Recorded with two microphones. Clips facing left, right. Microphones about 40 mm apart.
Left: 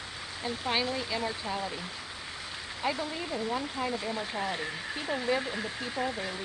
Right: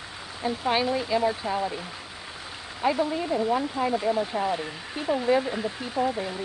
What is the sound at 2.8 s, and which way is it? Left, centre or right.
Speech, centre.